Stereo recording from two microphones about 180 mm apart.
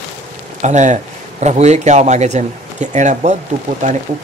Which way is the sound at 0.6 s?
40° right (ahead or behind).